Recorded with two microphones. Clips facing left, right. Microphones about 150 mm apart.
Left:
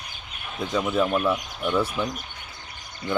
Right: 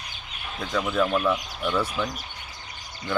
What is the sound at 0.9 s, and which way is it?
Speech, 10° left (ahead or behind).